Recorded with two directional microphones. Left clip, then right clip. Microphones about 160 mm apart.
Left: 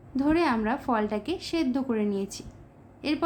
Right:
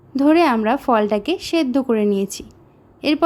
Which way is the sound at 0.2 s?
55° right (ahead or behind).